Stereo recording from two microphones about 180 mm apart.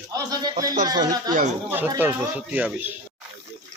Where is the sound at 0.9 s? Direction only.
20° right (ahead or behind).